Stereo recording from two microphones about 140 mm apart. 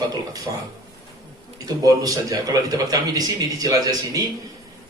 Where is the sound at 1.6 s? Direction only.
25° right (ahead or behind).